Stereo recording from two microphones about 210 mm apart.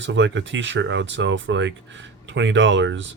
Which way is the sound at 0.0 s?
60° right (ahead or behind).